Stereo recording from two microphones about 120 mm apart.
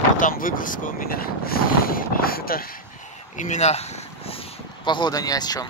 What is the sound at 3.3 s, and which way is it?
Speech, 80° left.